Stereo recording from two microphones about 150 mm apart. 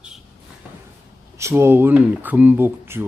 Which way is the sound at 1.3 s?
20° right (ahead or behind).